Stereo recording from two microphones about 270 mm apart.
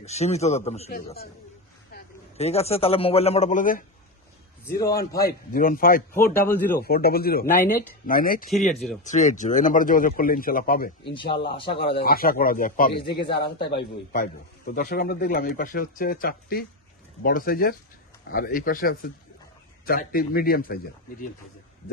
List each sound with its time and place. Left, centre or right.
0.0 s a man's voice: left
0.9 s speech: left
2.4 s a man's voice: left
4.6 s a man's voice: centre
4.9 s speech: left
6.1 s a man's voice: centre
6.7 s speech: left
8.4 s speech: centre
9.0 s speech: left
11.1 s a man's voice: centre
11.7 s speech: left